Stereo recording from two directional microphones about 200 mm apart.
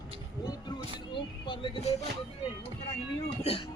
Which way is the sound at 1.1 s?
25° left (ahead or behind).